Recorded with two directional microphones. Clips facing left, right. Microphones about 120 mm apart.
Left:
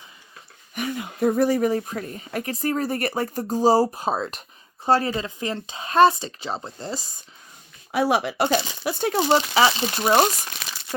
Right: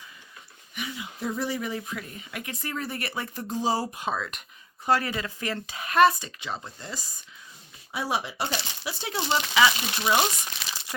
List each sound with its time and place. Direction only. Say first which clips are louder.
0.7 s speech: left 8 dB; 50° left (ahead or behind); by 7.1 s 30° left (ahead or behind)
7.9 s speech: left 8 dB; 65° left (ahead or behind); by 10.2 s 45° left (ahead or behind)